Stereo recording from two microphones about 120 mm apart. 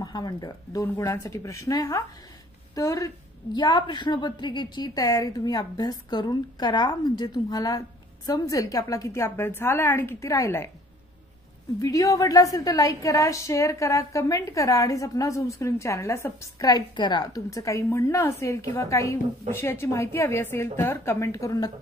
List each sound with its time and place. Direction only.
0.0 s a woman's voice: 35° left (ahead or behind)
0.8 s a woman's voice: 20° left (ahead or behind)
11.8 s a woman's voice: 30° left (ahead or behind)